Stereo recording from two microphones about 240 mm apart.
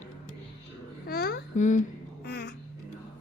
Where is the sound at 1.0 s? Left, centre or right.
Left.